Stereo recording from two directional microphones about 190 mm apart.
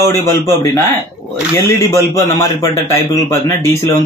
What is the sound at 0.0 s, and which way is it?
Speech, 15° left (ahead or behind).